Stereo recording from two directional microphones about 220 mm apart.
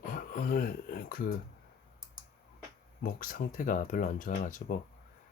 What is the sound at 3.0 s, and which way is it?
Speech, 40° left (ahead or behind).